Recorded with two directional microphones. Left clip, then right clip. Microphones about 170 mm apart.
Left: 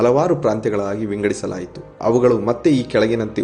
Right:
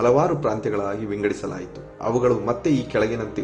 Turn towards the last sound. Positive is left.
turn(degrees=25)  # may be behind; listen again after turning